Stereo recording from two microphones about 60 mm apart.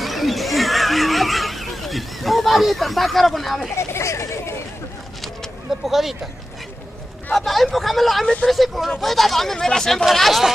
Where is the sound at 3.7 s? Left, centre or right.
Left.